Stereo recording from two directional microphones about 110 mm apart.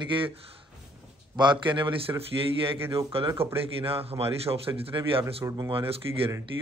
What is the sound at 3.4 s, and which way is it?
Speech, 60° right (ahead or behind).